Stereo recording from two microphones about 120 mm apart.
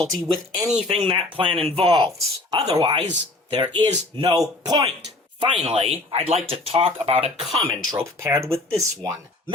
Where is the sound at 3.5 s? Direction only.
45° right (ahead or behind).